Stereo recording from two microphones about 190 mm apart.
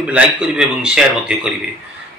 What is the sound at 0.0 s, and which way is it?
A man's voice, 5° right (ahead or behind).